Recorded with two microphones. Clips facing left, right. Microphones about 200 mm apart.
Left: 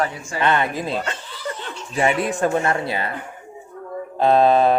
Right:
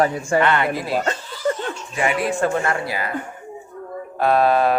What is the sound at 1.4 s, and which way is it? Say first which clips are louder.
Chuckle: right 8 dB; 45° right (ahead or behind).